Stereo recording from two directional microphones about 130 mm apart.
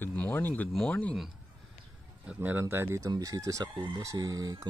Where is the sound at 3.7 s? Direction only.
40° right (ahead or behind).